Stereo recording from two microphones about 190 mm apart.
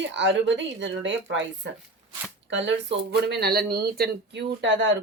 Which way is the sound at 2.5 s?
70° right (ahead or behind).